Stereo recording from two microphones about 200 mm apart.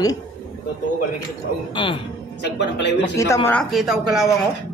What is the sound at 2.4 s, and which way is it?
Speech, 60° left (ahead or behind).